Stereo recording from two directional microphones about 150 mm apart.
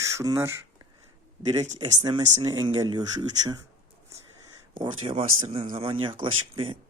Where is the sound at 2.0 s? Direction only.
25° right (ahead or behind).